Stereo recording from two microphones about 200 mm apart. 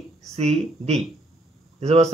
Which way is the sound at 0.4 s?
35° right (ahead or behind).